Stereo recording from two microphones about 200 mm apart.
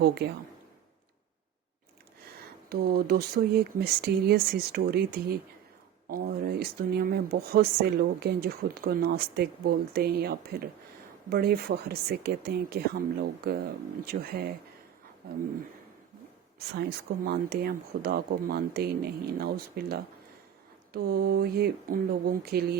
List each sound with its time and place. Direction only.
0.0 s speech: 55° right (ahead or behind)
2.6 s speech: 50° right (ahead or behind)
17.2 s speech: 50° right (ahead or behind)